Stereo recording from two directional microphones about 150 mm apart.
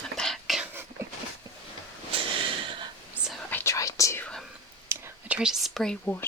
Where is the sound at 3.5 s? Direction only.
20° left (ahead or behind).